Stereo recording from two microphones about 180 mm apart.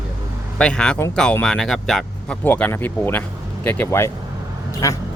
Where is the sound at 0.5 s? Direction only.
5° left (ahead or behind).